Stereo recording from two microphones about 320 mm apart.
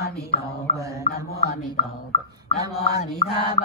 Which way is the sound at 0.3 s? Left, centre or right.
Centre.